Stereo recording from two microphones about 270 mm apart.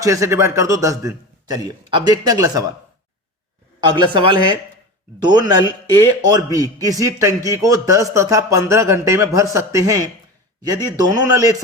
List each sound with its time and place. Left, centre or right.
0.0 s speech: centre
3.8 s speech: centre